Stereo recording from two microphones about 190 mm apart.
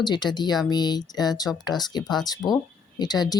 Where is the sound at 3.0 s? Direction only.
20° left (ahead or behind).